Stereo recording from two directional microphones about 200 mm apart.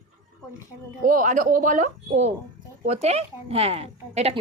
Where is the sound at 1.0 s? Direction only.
40° right (ahead or behind).